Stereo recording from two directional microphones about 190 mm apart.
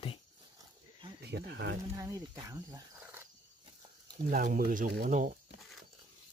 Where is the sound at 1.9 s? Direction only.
20° right (ahead or behind).